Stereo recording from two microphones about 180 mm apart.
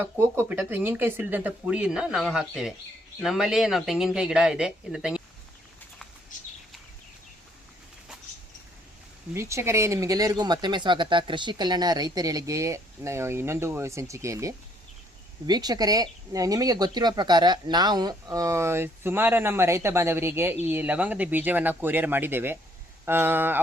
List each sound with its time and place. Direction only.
0.0 s speech: 10° right (ahead or behind)
9.3 s speech: 15° right (ahead or behind)